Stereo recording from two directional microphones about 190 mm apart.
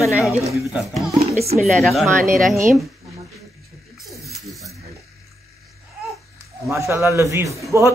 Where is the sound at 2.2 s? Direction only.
45° right (ahead or behind).